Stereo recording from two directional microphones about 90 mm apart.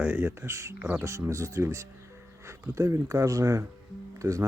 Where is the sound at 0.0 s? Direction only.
20° right (ahead or behind).